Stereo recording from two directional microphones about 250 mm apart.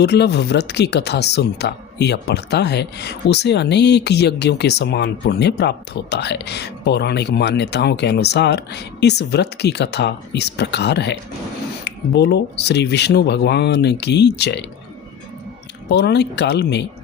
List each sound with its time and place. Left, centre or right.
0.0 s speech: left
15.9 s speech: left